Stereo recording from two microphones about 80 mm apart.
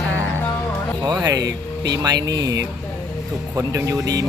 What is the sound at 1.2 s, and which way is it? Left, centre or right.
Speech, right.